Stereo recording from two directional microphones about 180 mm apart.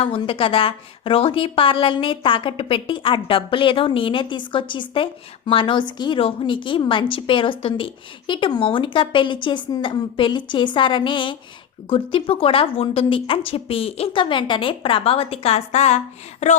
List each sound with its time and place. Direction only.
0.0 s a woman's voice: 30° left (ahead or behind)